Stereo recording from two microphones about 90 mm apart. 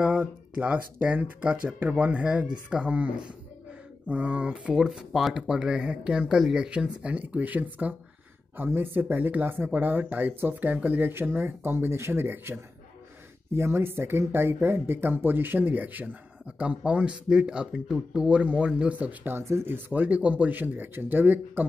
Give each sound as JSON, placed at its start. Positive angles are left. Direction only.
{"t": 0.0, "sound": "speech", "side_deg": -15}
{"t": 13.6, "sound": "speech", "side_deg": -25}
{"t": 19.3, "sound": "speech", "side_deg": -30}